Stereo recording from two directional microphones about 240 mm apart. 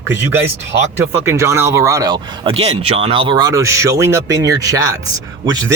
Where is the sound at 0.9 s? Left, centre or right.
Centre.